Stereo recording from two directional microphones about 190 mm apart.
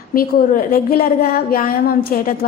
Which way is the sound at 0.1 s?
50° left (ahead or behind).